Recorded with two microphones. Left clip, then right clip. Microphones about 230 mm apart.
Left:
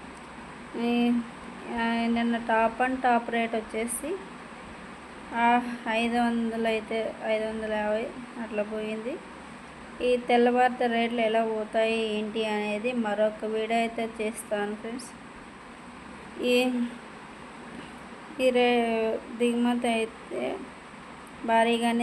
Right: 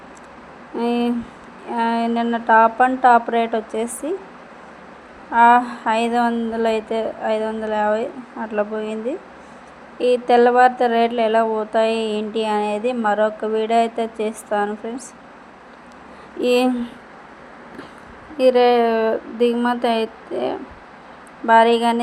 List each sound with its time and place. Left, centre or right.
0.8 s a woman's voice: centre
5.3 s a woman's voice: centre
16.4 s speech: right
18.3 s a woman's voice: centre